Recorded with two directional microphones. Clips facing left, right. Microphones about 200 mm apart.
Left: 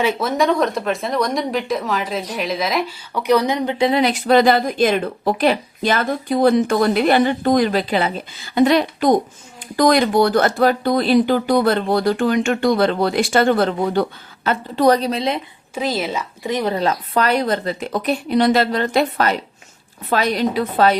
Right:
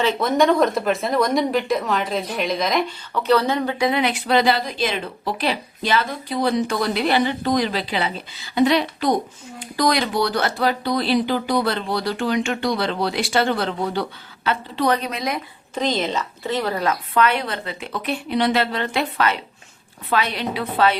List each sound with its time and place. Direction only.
0.0 s a woman's voice: 5° left (ahead or behind)
3.8 s speech: 30° left (ahead or behind)
15.7 s a woman's voice: 5° left (ahead or behind)
17.2 s a woman's voice: 40° left (ahead or behind)